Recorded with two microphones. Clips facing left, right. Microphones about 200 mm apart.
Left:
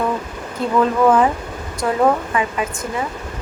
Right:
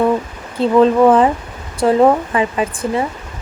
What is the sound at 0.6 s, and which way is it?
Speech, 30° right (ahead or behind).